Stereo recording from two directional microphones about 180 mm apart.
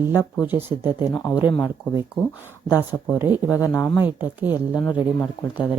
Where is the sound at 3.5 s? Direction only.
20° left (ahead or behind).